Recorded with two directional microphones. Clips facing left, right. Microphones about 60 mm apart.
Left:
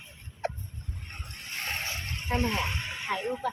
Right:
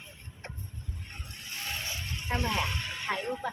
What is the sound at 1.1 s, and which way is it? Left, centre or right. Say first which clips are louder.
Splash: left 4 dB; left.